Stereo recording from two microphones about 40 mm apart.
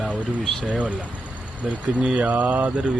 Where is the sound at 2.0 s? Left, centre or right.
Right.